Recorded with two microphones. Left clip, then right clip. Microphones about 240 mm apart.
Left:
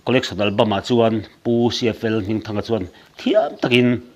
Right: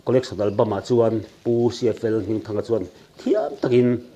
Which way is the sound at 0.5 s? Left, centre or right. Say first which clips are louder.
Left 4 dB; left.